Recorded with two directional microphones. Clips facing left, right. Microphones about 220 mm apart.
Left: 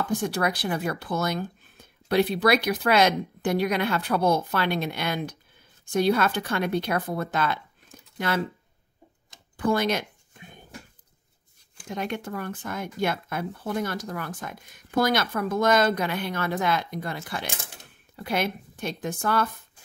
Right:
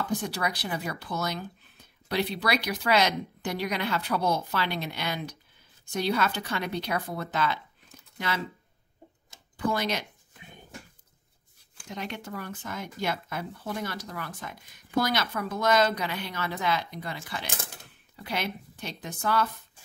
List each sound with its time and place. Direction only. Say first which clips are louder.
0.2 s speech: left 5 dB; 50° left (ahead or behind)
9.6 s speech: left 5 dB; 50° left (ahead or behind)
11.9 s speech: left 5 dB; 50° left (ahead or behind)